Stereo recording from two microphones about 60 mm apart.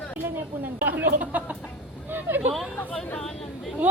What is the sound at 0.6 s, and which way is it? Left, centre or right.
A woman's voice, right.